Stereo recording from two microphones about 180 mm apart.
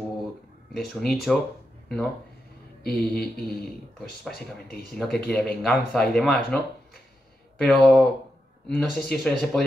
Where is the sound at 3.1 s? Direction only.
60° left (ahead or behind).